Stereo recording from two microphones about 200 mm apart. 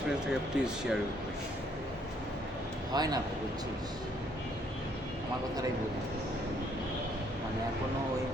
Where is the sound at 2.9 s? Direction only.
20° right (ahead or behind).